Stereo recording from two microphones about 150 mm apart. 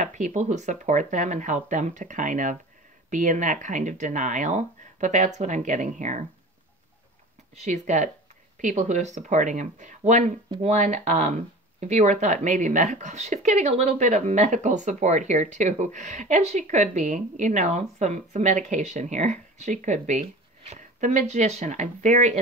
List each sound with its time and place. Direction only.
0.0 s speech: 55° right (ahead or behind)
7.6 s speech: 50° right (ahead or behind)